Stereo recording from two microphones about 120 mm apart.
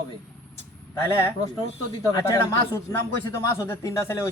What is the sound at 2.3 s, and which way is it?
A man's voice, 20° left (ahead or behind).